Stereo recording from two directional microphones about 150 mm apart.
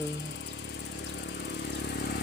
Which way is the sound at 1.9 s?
90° left.